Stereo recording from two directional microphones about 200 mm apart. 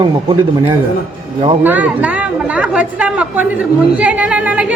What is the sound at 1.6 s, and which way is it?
A woman's voice, 10° right (ahead or behind).